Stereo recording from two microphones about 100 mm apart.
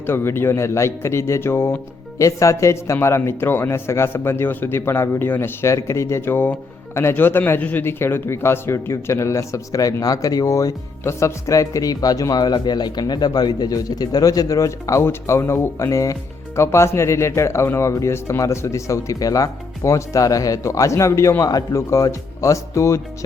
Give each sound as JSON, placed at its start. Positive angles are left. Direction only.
{"t": 0.0, "sound": "a man's voice", "side_deg": 25}